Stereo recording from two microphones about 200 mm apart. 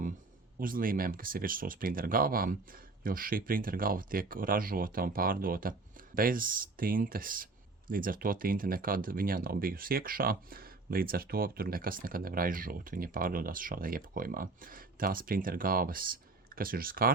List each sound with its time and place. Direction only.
0.6 s speech: 45° right (ahead or behind)